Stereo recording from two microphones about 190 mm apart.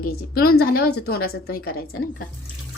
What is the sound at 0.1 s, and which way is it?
A woman's voice, 55° left (ahead or behind).